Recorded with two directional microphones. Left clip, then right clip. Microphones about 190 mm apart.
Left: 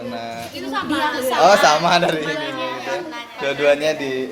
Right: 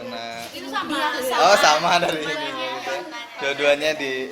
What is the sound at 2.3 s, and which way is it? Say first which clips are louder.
Speech: left 2 dB; 25° right (ahead or behind).